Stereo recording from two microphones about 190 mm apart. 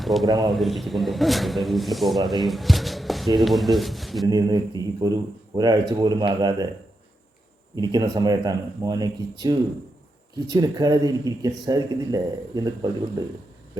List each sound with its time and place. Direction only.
0.0 s speech: centre (ahead or behind)
0.3 s speech: 25° right (ahead or behind)
0.5 s speech: centre (ahead or behind)
4.3 s speech: 20° right (ahead or behind)
7.8 s speech: 20° right (ahead or behind)